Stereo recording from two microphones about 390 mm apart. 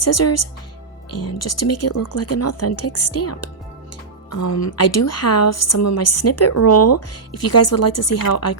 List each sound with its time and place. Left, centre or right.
0.0 s a woman's voice: left